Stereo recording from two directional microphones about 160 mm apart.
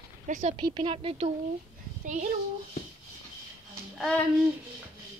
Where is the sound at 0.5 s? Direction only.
30° right (ahead or behind).